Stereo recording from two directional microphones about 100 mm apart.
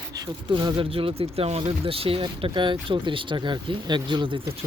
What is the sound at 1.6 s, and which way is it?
Speech, 70° right (ahead or behind).